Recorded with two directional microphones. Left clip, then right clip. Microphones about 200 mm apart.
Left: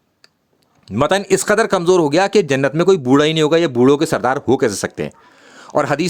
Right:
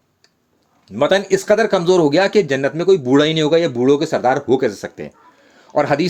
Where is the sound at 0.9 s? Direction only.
40° left (ahead or behind).